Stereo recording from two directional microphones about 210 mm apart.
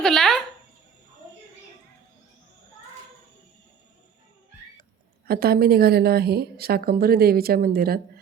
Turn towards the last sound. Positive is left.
turn(degrees=-45)  # may be behind; listen again after turning